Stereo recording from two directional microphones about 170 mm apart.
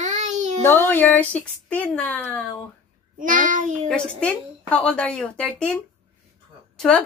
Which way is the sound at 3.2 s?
50° right (ahead or behind).